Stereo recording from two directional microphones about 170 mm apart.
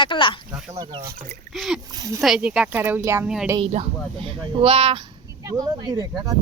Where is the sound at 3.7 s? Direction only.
35° right (ahead or behind).